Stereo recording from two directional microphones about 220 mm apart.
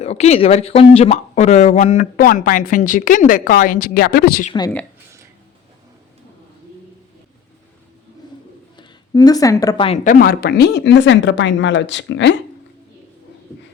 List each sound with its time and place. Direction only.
0.0 s speech: 30° left (ahead or behind)
8.7 s a woman's voice: 20° left (ahead or behind); by 12.4 s 55° left (ahead or behind)